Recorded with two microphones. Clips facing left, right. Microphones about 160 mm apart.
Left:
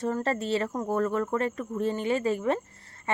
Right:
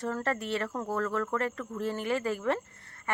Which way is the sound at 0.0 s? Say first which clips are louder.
Left 4 dB; 25° left (ahead or behind).